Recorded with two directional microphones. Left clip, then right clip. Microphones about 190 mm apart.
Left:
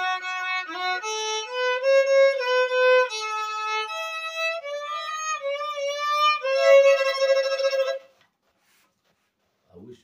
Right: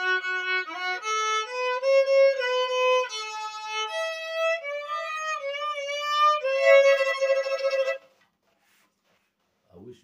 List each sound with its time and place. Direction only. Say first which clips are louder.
0.0 s violin: right 1 dB; centre (ahead or behind)
4.6 s music: left 1 dB; centre (ahead or behind)